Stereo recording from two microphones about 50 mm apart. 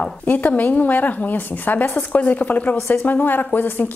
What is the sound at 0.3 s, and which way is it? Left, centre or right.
A woman's voice, left.